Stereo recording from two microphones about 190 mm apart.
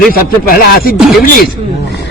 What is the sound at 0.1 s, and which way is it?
Speech, 50° left (ahead or behind).